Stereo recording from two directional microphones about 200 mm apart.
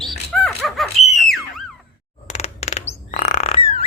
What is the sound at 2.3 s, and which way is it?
Bird, 35° left (ahead or behind).